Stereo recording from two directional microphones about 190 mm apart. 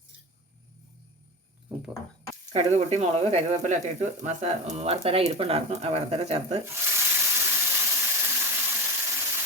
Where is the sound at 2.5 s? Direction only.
35° right (ahead or behind).